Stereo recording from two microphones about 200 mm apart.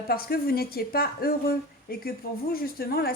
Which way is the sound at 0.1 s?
50° left (ahead or behind).